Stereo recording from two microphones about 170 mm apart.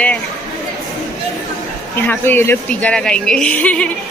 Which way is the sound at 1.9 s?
10° left (ahead or behind).